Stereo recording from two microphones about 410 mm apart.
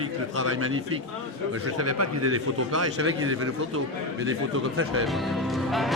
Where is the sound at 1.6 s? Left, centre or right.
Right.